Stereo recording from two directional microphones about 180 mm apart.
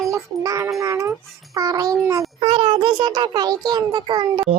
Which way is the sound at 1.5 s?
20° right (ahead or behind).